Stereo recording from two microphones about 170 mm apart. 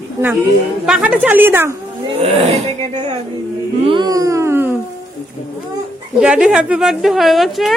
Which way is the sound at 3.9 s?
25° right (ahead or behind).